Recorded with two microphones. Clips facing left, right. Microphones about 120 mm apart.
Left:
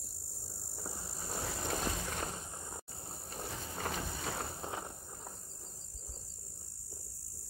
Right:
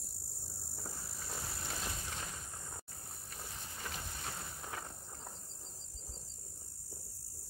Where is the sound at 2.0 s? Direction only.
65° left (ahead or behind).